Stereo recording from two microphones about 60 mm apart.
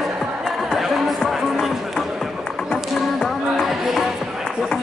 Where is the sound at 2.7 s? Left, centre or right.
Centre.